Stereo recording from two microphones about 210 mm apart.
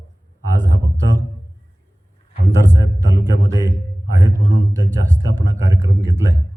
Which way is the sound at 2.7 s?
15° right (ahead or behind).